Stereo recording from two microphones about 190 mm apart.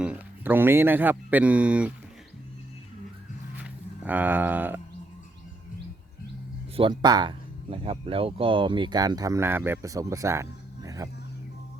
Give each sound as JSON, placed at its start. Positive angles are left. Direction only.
{"t": 0.0, "sound": "speech", "side_deg": -10}
{"t": 3.6, "sound": "speech", "side_deg": -10}
{"t": 6.7, "sound": "speech", "side_deg": -25}